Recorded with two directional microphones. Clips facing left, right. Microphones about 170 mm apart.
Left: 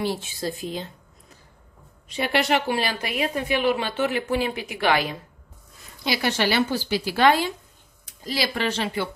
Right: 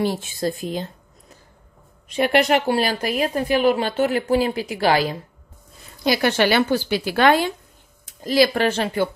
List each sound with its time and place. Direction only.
0.0 s speech: 45° right (ahead or behind)
2.0 s a woman's voice: 50° right (ahead or behind)
6.0 s a woman's voice: 55° right (ahead or behind)